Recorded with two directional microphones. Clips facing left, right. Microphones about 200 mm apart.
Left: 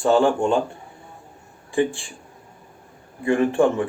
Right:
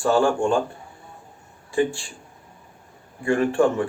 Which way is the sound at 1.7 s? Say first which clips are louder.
Left 1 dB; 20° left (ahead or behind).